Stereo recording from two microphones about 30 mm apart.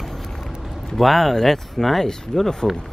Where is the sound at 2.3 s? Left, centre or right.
Centre.